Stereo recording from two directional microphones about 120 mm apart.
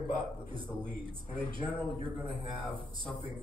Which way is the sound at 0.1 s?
45° right (ahead or behind).